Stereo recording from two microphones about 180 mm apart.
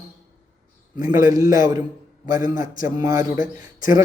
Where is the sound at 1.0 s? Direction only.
50° left (ahead or behind).